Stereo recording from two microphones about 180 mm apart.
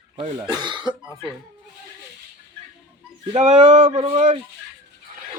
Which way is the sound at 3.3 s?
35° right (ahead or behind).